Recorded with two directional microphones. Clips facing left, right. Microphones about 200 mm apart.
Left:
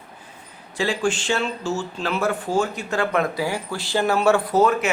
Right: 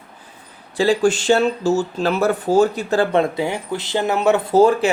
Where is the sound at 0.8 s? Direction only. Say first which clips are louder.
Right 7 dB; 35° right (ahead or behind); by 4.6 s 20° right (ahead or behind).